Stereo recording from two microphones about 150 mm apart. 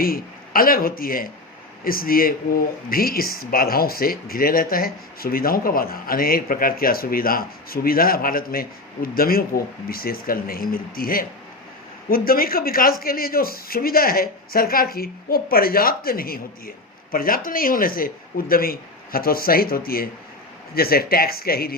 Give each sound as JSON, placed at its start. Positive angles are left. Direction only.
{"t": 0.0, "sound": "speech", "side_deg": 75}
{"t": 20.7, "sound": "speech", "side_deg": 90}